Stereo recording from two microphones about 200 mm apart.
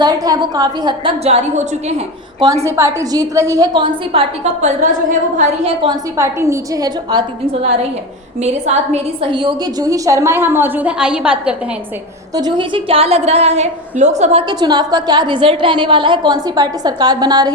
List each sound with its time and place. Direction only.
0.0 s a woman's voice: 20° right (ahead or behind)
2.6 s a woman's voice: 15° right (ahead or behind)
4.6 s a woman's voice: 35° right (ahead or behind)
6.1 s a woman's voice: 15° right (ahead or behind)
8.4 s a woman's voice: 35° right (ahead or behind); by 11.5 s 5° right (ahead or behind)
12.3 s a woman's voice: 20° right (ahead or behind)
14.4 s a woman's voice: 20° right (ahead or behind)